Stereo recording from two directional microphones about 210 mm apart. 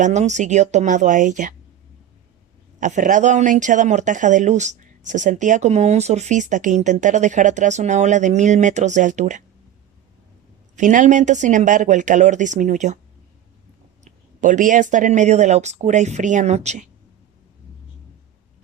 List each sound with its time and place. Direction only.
0.0 s speech: 35° right (ahead or behind)
2.8 s speech: 35° right (ahead or behind)
10.8 s speech: 35° right (ahead or behind)
14.0 s speech: 35° right (ahead or behind)